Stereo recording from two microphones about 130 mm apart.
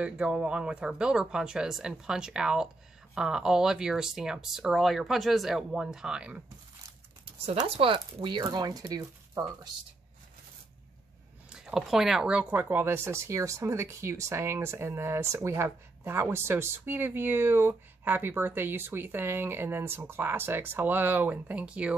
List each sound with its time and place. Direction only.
0.0 s speech: 5° right (ahead or behind)
7.6 s speech: 45° right (ahead or behind); by 9.7 s 30° right (ahead or behind)
11.5 s speech: 5° right (ahead or behind)